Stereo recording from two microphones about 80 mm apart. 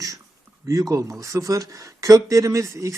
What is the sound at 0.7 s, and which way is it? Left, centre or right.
Speech, right.